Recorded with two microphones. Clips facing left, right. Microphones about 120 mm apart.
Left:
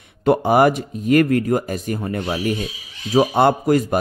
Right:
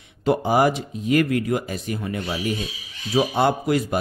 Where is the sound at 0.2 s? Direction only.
55° left (ahead or behind).